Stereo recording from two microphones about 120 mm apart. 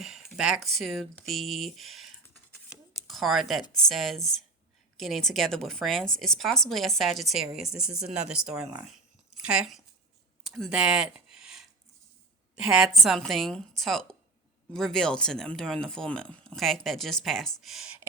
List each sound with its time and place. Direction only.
0.0 s a woman's voice: centre (ahead or behind)
8.9 s a sound: 5° right (ahead or behind)
12.6 s a woman's voice: 5° right (ahead or behind)